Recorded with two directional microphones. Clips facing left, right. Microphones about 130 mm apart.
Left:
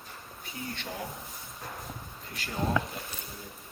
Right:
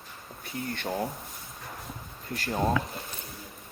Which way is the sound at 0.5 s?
50° right (ahead or behind).